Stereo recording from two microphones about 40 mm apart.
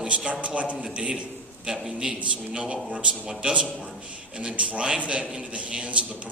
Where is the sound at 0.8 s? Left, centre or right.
Right.